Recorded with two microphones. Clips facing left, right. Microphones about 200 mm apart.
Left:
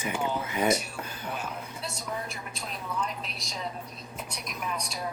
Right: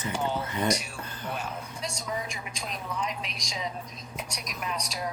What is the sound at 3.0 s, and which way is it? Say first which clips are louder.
Speech: right 2 dB; 90° right.